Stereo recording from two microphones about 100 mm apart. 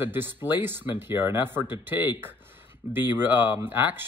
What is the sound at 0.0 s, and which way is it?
Speech, 20° right (ahead or behind).